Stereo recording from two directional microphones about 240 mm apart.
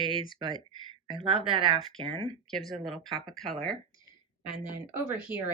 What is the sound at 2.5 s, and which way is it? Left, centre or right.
Speech, centre.